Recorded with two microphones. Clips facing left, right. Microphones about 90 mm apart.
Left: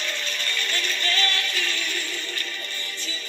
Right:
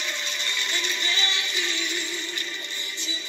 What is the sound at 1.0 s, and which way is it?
Music, 20° right (ahead or behind).